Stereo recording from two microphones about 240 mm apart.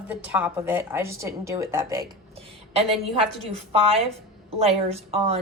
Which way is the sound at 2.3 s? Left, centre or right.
Right.